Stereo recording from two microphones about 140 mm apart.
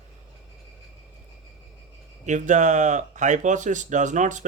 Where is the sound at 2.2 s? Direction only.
60° right (ahead or behind).